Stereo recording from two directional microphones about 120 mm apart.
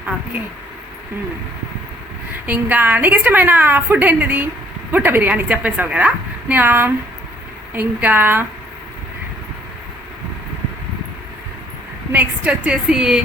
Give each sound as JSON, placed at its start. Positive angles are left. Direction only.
{"t": 2.5, "sound": "a woman's voice", "side_deg": -15}
{"t": 12.1, "sound": "a woman's voice", "side_deg": -15}